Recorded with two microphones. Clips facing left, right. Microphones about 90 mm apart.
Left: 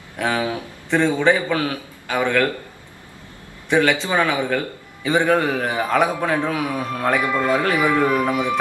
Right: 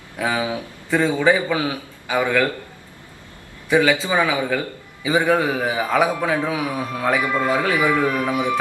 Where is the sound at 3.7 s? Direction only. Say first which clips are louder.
Right 1 dB; 5° right (ahead or behind).